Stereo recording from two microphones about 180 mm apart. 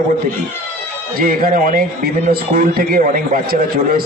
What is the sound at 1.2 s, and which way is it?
A man's voice, 50° right (ahead or behind).